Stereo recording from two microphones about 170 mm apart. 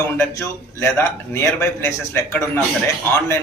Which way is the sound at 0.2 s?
15° left (ahead or behind).